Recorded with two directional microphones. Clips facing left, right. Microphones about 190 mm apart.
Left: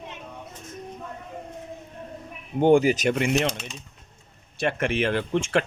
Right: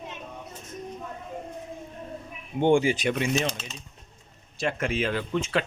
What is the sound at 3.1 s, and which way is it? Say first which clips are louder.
Speech: left 3 dB; 65° left (ahead or behind).